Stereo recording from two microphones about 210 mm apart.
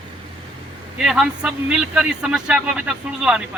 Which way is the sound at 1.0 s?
5° right (ahead or behind).